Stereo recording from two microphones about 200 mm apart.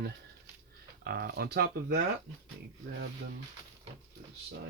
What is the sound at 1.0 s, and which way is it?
Speech, 50° right (ahead or behind).